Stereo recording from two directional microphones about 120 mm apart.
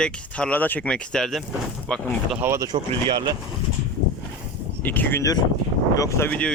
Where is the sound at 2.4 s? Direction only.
25° right (ahead or behind).